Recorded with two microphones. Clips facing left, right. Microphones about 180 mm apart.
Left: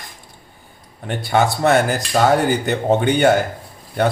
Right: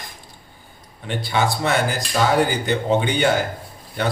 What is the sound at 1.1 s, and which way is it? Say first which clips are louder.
Speech: left 4 dB; 45° left (ahead or behind).